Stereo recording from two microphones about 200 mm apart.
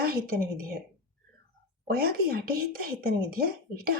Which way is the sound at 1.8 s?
50° right (ahead or behind).